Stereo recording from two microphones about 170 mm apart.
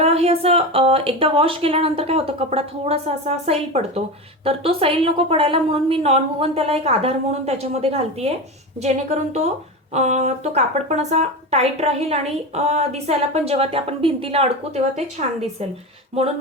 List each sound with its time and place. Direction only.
0.0 s a woman's voice: 35° right (ahead or behind)